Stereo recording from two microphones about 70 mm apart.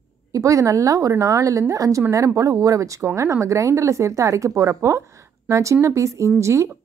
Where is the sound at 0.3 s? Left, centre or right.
Right.